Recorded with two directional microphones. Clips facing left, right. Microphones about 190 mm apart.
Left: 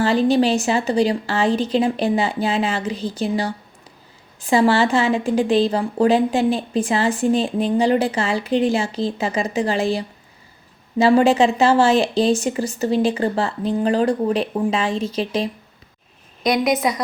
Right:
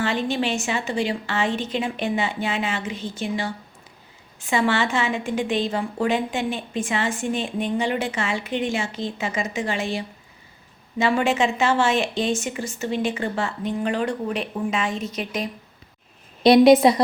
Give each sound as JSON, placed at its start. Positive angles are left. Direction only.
{"t": 0.0, "sound": "a woman's voice", "side_deg": 35}
{"t": 16.4, "sound": "a woman's voice", "side_deg": -30}